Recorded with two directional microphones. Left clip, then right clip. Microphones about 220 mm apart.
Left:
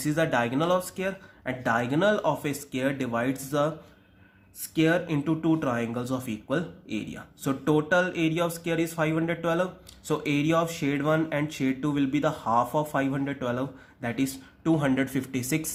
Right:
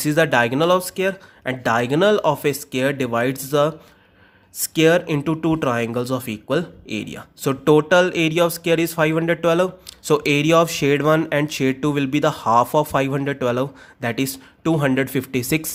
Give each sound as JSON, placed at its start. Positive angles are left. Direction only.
{"t": 0.0, "sound": "speech", "side_deg": -40}